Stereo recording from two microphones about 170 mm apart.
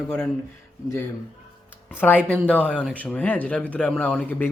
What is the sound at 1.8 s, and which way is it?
Speech, 10° left (ahead or behind).